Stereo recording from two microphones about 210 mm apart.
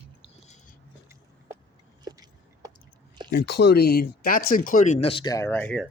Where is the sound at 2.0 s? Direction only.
20° right (ahead or behind).